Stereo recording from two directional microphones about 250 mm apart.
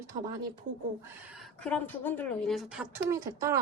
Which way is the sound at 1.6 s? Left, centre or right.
Centre.